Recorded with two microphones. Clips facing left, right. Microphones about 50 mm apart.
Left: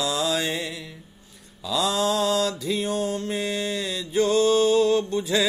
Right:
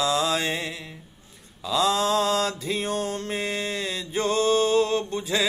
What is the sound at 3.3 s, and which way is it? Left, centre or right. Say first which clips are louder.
Mantra: left 1 dB; right.